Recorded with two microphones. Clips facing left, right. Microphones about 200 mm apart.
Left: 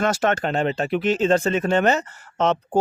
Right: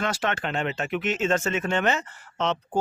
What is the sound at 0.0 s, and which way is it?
Speech, 45° left (ahead or behind).